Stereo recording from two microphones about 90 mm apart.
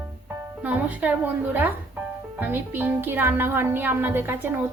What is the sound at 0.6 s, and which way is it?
Speech, 15° right (ahead or behind).